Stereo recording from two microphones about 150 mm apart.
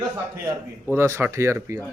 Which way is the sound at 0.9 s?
15° right (ahead or behind).